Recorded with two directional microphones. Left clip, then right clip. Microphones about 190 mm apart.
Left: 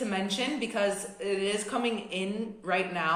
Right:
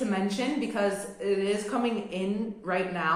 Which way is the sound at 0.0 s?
35° left (ahead or behind).